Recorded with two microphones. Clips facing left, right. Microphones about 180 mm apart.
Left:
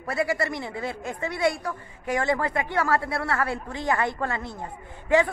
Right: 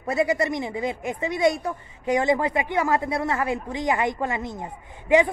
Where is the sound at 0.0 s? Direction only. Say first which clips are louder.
Right 4 dB; 20° right (ahead or behind).